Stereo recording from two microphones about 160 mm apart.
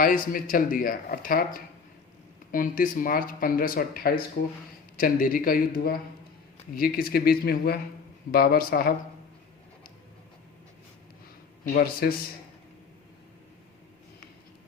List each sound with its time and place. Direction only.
0.0 s speech: 60° left (ahead or behind)
11.6 s speech: 65° left (ahead or behind)